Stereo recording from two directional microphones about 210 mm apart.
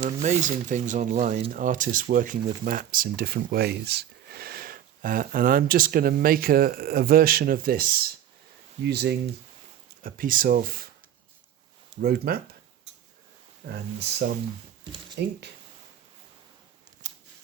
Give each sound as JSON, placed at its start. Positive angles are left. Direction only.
{"t": 0.2, "sound": "speech", "side_deg": -35}
{"t": 11.9, "sound": "speech", "side_deg": -45}
{"t": 13.7, "sound": "speech", "side_deg": -50}
{"t": 17.0, "sound": "scissors", "side_deg": -35}